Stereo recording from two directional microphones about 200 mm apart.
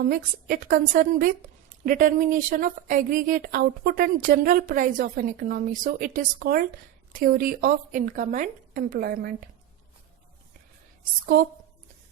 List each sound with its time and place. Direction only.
0.0 s speech: 45° right (ahead or behind)